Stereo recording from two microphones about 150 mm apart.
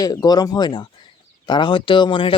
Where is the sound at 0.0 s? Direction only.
25° left (ahead or behind).